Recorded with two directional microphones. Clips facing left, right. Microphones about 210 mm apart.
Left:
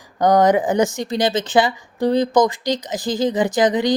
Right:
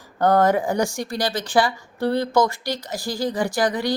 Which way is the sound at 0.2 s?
15° left (ahead or behind).